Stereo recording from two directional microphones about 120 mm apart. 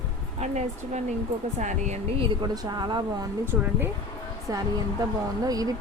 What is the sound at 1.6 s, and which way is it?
Speech, 85° right.